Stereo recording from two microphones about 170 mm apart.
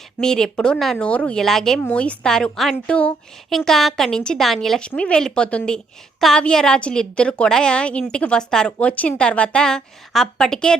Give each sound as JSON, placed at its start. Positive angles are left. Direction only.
{"t": 0.2, "sound": "a woman's voice", "side_deg": 5}